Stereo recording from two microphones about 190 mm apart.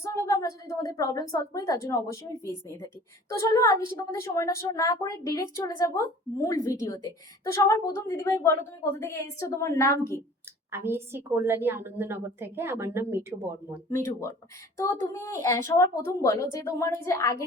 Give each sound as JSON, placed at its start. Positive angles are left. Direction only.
{"t": 0.0, "sound": "a woman's voice", "side_deg": 15}
{"t": 10.7, "sound": "a woman's voice", "side_deg": -10}
{"t": 15.1, "sound": "a woman's voice", "side_deg": 15}